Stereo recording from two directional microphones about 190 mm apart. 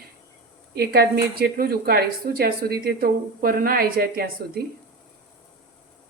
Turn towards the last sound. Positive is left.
turn(degrees=-55)  # may be behind; listen again after turning